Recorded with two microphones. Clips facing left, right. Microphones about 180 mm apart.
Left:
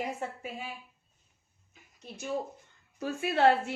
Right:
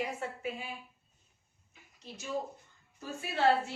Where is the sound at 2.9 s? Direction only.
70° left (ahead or behind).